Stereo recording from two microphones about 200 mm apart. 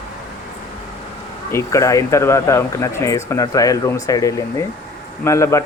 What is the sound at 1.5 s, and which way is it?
Speech, 15° left (ahead or behind).